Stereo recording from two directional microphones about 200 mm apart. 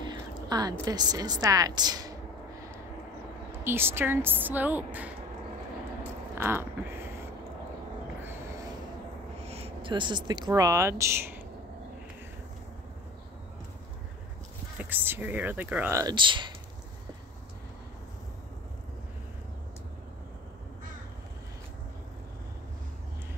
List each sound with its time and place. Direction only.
0.0 s a sound: 20° right (ahead or behind)
0.8 s a woman's voice: 20° right (ahead or behind)
3.6 s speech: 10° right (ahead or behind)
6.3 s a sound: 10° right (ahead or behind)
9.4 s speech: 30° right (ahead or behind); by 11.4 s 10° right (ahead or behind)
14.8 s speech: 10° right (ahead or behind)